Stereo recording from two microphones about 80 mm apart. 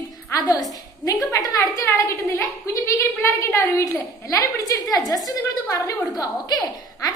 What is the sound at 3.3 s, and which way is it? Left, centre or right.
A woman's voice, left.